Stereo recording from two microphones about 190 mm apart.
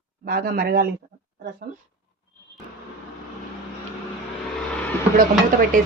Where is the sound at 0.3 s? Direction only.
55° right (ahead or behind).